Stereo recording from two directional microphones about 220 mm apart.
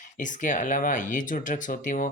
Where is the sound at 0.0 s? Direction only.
35° left (ahead or behind).